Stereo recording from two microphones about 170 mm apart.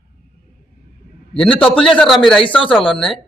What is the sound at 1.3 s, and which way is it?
Speech, 30° left (ahead or behind).